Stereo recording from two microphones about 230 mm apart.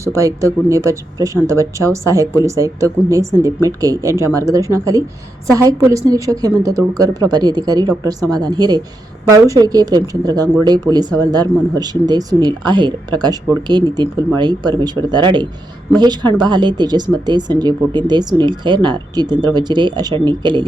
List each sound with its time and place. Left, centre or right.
0.0 s speech: centre